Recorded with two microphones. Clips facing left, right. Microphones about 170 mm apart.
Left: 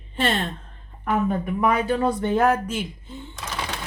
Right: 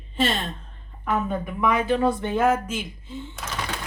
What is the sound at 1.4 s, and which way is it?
Speech, 45° left (ahead or behind).